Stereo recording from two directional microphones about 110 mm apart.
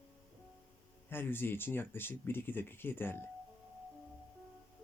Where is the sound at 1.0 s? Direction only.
20° left (ahead or behind).